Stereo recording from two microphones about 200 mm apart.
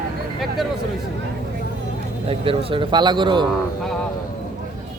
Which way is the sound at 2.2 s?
25° right (ahead or behind).